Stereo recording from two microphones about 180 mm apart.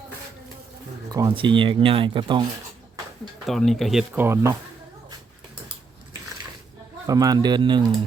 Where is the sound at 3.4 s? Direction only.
Centre (ahead or behind); by 4.5 s 15° right (ahead or behind).